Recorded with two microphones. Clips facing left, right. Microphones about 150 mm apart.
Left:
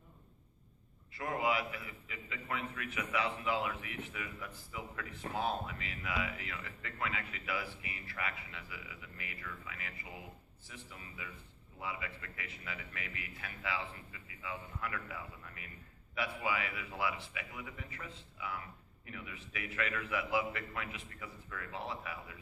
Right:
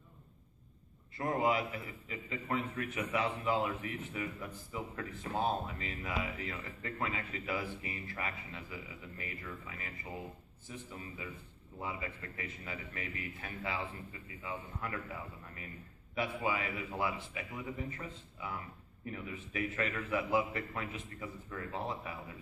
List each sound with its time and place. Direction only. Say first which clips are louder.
1.1 s a man's voice: right 4 dB; 25° right (ahead or behind)
1.6 s a man's voice: right 3 dB; 35° right (ahead or behind)